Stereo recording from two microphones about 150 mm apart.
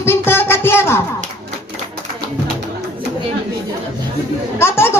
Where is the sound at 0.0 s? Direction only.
15° left (ahead or behind).